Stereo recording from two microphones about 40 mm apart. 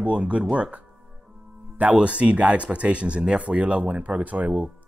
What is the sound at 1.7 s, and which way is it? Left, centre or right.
Speech, right.